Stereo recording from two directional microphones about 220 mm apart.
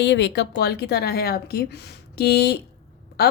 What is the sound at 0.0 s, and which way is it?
Speech, 50° left (ahead or behind).